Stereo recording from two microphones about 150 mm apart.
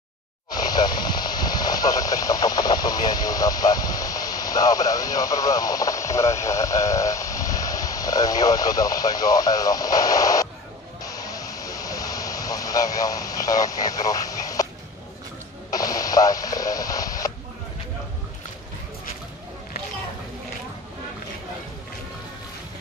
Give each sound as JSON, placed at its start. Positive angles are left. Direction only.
{"t": 0.6, "sound": "speech", "side_deg": 25}
{"t": 11.1, "sound": "a sound", "side_deg": 25}
{"t": 15.7, "sound": "speech", "side_deg": 25}